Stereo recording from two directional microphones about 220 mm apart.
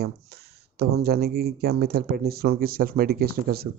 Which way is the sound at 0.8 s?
45° right (ahead or behind).